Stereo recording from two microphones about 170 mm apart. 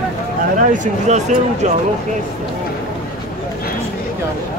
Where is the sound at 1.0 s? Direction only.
45° right (ahead or behind).